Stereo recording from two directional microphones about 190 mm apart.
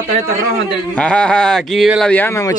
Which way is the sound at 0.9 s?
5° left (ahead or behind).